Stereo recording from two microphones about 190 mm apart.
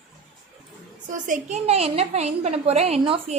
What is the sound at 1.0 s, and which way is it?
A woman's voice, 40° right (ahead or behind).